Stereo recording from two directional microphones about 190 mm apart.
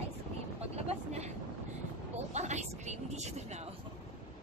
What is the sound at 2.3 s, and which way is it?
Speech, 35° right (ahead or behind).